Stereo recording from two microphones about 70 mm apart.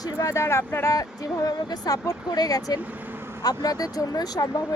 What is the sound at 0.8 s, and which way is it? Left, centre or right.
Speech, left.